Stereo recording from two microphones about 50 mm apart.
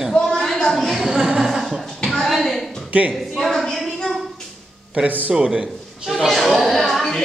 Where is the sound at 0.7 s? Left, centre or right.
Centre.